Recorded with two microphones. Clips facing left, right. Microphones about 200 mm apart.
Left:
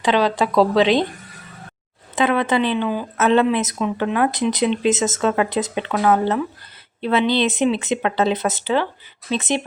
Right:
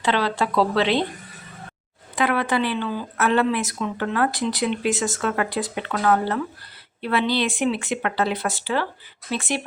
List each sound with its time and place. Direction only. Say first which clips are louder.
0.0 s speech: left 4 dB; 15° left (ahead or behind)
2.1 s speech: left 4 dB; 20° left (ahead or behind)